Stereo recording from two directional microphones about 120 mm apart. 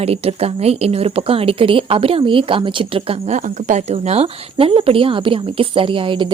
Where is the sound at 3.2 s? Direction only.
85° right.